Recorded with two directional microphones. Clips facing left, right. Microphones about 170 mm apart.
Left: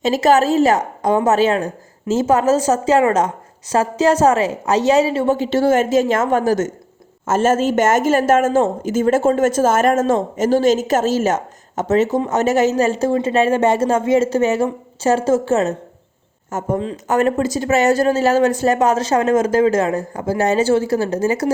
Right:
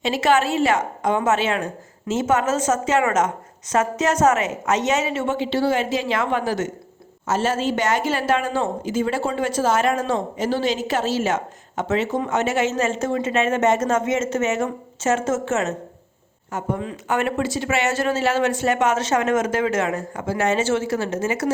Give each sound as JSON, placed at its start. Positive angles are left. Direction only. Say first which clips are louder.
{"t": 0.0, "sound": "speech", "louder": "left 5 dB", "side_deg": 40}